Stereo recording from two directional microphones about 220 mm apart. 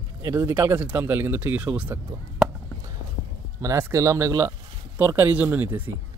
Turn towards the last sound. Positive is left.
turn(degrees=-10)  # may be behind; listen again after turning